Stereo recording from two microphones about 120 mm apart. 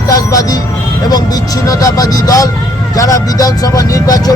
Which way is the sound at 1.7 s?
30° left (ahead or behind).